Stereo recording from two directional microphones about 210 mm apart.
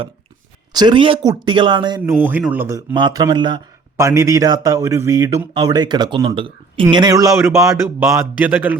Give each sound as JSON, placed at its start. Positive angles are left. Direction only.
{"t": 0.7, "sound": "speech", "side_deg": -20}
{"t": 2.1, "sound": "a man's voice", "side_deg": -10}